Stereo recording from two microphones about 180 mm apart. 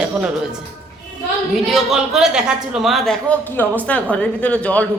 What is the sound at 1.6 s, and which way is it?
A man's voice, centre (ahead or behind).